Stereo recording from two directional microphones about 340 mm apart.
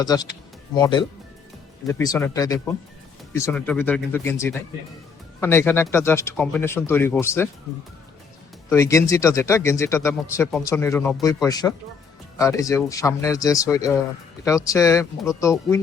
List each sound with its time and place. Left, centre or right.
0.0 s speech: centre
8.7 s speech: centre